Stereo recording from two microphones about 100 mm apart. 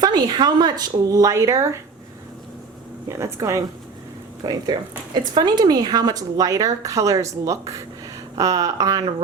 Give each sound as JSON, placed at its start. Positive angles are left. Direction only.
{"t": 0.0, "sound": "speech", "side_deg": -45}
{"t": 3.1, "sound": "speech", "side_deg": -30}
{"t": 4.4, "sound": "speech", "side_deg": -45}